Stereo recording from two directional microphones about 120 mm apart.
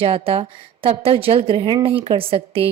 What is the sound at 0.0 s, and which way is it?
Speech, 50° right (ahead or behind).